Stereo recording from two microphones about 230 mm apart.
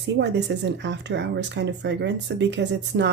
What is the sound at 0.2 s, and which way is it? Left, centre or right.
Speech, right.